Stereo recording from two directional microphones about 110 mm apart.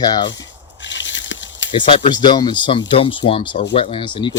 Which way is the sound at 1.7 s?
45° left (ahead or behind).